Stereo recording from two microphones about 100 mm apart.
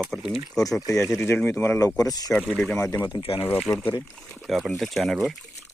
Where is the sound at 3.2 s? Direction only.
70° left (ahead or behind).